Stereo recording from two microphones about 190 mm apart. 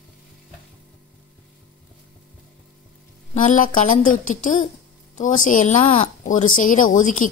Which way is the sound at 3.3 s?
45° left (ahead or behind).